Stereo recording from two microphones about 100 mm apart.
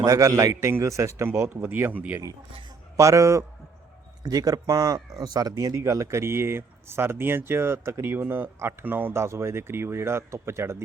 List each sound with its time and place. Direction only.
0.0 s speech: 35° right (ahead or behind); by 2.2 s 15° right (ahead or behind)
3.0 s a man's voice: 30° right (ahead or behind)